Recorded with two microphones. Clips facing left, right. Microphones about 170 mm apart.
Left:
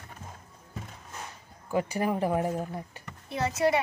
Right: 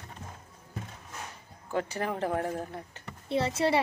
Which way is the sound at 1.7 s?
10° left (ahead or behind).